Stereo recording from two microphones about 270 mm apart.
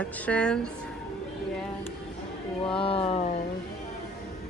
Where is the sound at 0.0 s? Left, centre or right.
Centre.